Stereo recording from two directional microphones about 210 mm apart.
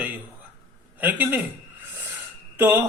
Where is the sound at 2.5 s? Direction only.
10° right (ahead or behind).